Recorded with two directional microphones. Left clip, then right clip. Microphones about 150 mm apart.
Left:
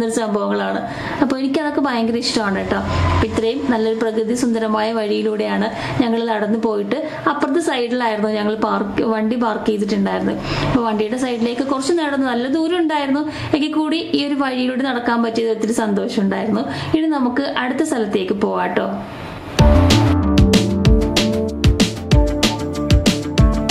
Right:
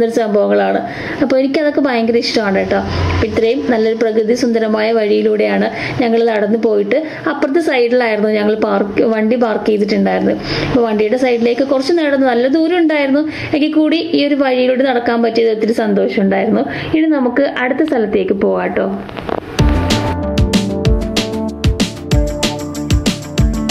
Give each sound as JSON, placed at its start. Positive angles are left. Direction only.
{"t": 0.1, "sound": "a woman's voice", "side_deg": -15}
{"t": 19.9, "sound": "music", "side_deg": 0}